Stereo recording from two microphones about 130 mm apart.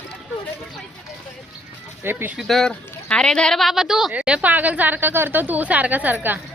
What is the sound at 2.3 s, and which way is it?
Speech, centre (ahead or behind).